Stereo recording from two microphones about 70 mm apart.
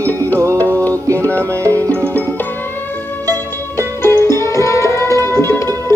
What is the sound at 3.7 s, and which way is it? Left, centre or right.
Music, right.